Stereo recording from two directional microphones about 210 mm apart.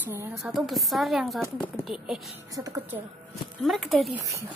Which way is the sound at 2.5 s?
15° right (ahead or behind).